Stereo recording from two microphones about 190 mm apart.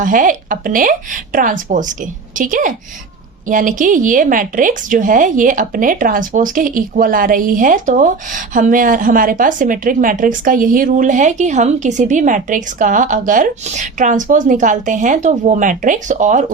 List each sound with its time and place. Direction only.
0.0 s a woman's voice: 45° right (ahead or behind)